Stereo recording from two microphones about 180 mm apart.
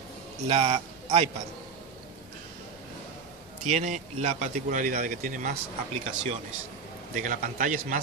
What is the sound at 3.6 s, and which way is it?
Speech, 40° right (ahead or behind).